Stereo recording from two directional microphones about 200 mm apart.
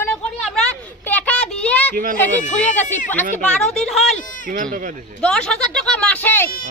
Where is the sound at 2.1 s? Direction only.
10° left (ahead or behind).